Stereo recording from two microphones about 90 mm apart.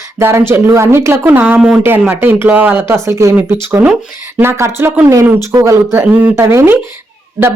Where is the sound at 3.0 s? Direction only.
35° right (ahead or behind).